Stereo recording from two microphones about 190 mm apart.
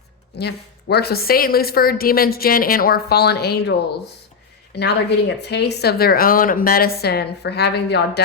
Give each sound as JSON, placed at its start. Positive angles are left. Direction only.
{"t": 0.3, "sound": "a woman's voice", "side_deg": 60}